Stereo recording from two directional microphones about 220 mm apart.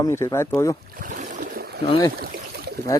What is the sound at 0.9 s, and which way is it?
Boat, 35° right (ahead or behind).